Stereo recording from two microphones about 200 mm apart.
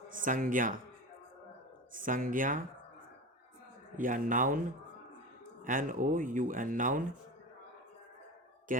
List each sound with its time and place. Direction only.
0.1 s speech: 40° right (ahead or behind)
1.9 s speech: 45° right (ahead or behind)
3.9 s speech: 40° right (ahead or behind)
5.6 s speech: 40° right (ahead or behind)
8.7 s a sound: 40° right (ahead or behind)